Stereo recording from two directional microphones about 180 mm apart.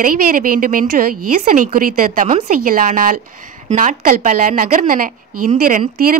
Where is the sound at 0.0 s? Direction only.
50° right (ahead or behind).